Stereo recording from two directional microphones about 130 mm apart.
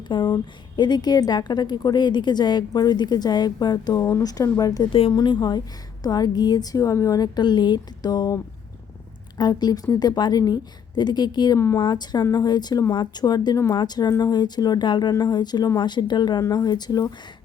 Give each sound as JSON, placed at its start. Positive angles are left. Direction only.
{"t": 0.1, "sound": "a woman's voice", "side_deg": 35}
{"t": 4.9, "sound": "a woman's voice", "side_deg": 45}
{"t": 9.4, "sound": "a woman's voice", "side_deg": 35}